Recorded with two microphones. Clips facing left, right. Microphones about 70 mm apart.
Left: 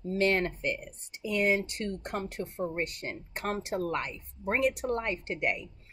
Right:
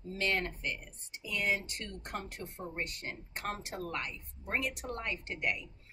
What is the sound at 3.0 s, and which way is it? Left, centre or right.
A woman's voice, left.